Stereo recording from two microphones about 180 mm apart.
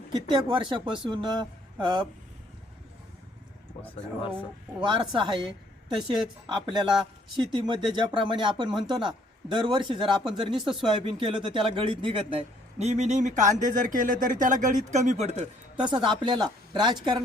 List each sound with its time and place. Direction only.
0.1 s speech: 25° right (ahead or behind)
4.9 s speech: 25° right (ahead or behind)
6.7 s speech: 25° right (ahead or behind)
10.6 s speech: centre (ahead or behind)
10.8 s speech: 25° right (ahead or behind)
15.8 s speech: 25° right (ahead or behind)